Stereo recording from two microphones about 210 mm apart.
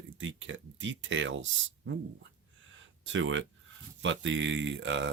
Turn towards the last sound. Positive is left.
turn(degrees=-60)  # may be behind; listen again after turning